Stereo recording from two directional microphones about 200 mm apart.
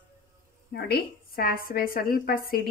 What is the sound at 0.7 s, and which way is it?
Speech, 50° left (ahead or behind).